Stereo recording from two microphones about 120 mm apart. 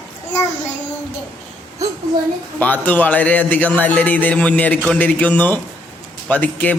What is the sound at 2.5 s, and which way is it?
A man's voice, 15° left (ahead or behind).